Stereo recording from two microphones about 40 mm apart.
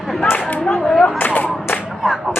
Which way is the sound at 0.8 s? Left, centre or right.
Centre.